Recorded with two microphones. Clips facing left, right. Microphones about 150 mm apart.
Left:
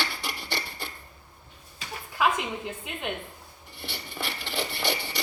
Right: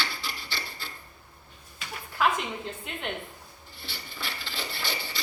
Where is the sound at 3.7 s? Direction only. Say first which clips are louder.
Left 5 dB; 65° left (ahead or behind).